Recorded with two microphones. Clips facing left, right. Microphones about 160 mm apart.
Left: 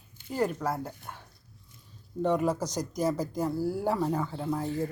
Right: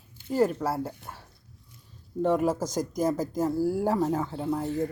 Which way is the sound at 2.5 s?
45° right (ahead or behind).